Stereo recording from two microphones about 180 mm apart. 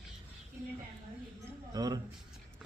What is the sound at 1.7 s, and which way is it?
Speech, 20° right (ahead or behind).